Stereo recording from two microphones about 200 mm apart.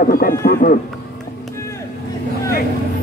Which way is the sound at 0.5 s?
45° left (ahead or behind).